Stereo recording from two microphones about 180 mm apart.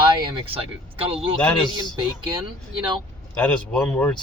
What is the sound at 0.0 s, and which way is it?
Speech, 30° right (ahead or behind).